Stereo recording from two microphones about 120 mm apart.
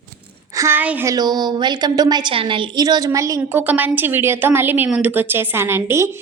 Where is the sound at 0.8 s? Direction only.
15° right (ahead or behind).